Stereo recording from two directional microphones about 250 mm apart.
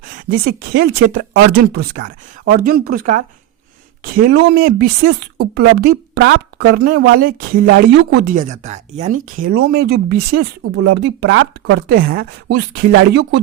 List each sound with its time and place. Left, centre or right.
0.0 s speech: right
11.9 s speech: right